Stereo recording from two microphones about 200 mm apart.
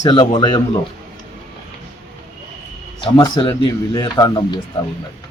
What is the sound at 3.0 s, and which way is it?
A man's voice, 20° left (ahead or behind).